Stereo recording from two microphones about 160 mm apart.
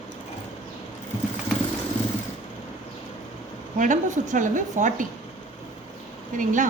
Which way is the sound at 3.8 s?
50° right (ahead or behind).